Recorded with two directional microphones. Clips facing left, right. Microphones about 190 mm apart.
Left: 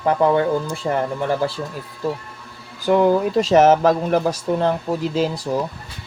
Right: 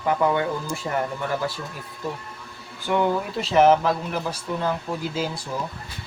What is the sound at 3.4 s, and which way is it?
Speech, 45° left (ahead or behind).